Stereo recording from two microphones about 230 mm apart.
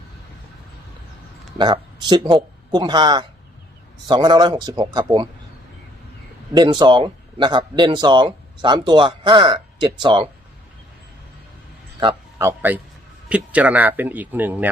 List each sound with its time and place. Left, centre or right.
1.5 s speech: centre
6.5 s speech: centre
11.9 s a man's voice: centre